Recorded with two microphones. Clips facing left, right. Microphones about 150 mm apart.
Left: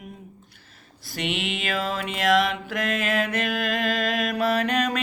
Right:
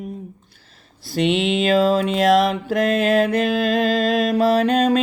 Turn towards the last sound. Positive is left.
turn(degrees=-30)  # may be behind; listen again after turning